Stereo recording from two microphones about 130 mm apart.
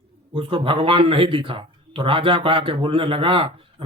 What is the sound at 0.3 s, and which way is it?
Speech, 40° right (ahead or behind).